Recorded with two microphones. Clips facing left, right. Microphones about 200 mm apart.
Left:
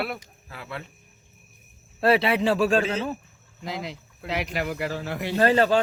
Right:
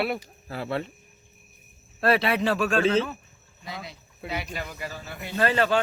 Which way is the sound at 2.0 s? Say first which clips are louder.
Left 2 dB; 25° left (ahead or behind).